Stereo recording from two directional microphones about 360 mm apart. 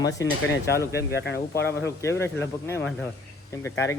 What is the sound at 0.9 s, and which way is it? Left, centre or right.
Speech, left.